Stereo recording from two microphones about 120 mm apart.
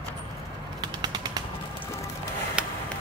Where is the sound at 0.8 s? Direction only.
35° right (ahead or behind).